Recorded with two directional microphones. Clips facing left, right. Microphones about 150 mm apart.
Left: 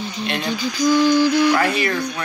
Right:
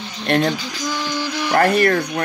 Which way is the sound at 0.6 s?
15° left (ahead or behind).